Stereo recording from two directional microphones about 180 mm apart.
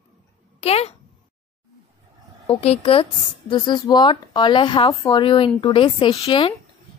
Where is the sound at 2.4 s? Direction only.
35° left (ahead or behind).